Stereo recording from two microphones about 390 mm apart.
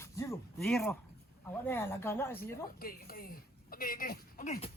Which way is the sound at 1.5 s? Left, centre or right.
Centre.